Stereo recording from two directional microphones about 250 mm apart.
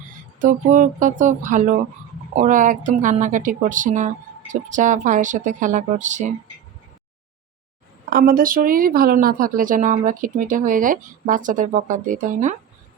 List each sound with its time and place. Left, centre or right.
0.3 s speech: right
8.1 s speech: right